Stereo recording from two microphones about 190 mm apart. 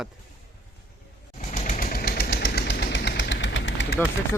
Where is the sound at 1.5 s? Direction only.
40° left (ahead or behind); by 4.0 s 70° left (ahead or behind).